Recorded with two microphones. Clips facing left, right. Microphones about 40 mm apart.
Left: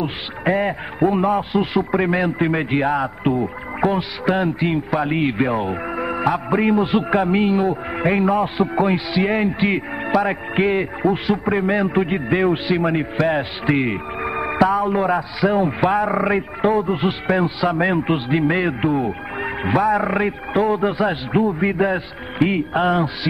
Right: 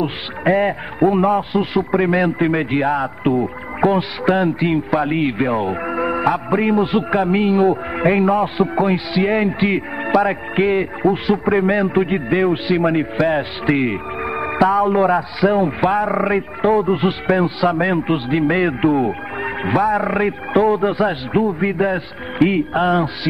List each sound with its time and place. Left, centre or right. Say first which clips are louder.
0.0 s speech: right 3 dB; centre